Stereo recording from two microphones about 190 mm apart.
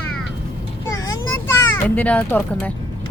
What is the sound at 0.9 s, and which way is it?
Vehicle, 15° left (ahead or behind).